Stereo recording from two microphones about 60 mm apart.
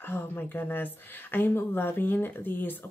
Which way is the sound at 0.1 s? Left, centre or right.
Left.